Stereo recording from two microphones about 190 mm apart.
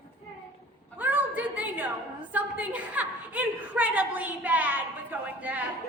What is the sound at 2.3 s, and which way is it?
A woman's voice, 10° right (ahead or behind).